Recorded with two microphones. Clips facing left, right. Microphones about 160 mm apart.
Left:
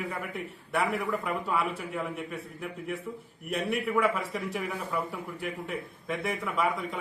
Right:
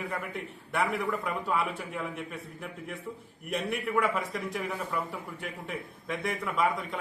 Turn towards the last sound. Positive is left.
turn(degrees=0)  # may be behind; listen again after turning